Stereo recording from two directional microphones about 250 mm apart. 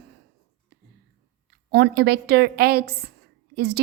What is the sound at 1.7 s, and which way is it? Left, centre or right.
A woman's voice, right.